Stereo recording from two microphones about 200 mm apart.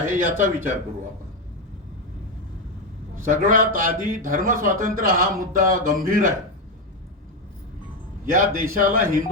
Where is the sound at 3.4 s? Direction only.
40° right (ahead or behind).